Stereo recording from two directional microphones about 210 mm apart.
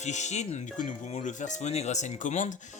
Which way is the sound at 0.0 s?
35° left (ahead or behind).